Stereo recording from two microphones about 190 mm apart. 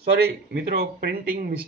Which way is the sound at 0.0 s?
55° right (ahead or behind).